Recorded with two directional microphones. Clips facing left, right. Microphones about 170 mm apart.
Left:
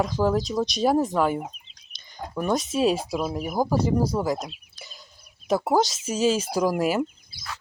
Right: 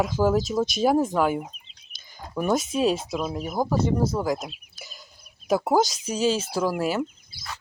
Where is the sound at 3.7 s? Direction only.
35° left (ahead or behind).